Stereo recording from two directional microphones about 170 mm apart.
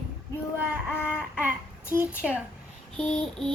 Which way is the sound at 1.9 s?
10° right (ahead or behind).